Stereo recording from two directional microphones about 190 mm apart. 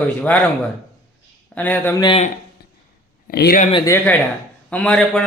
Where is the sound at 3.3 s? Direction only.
55° left (ahead or behind).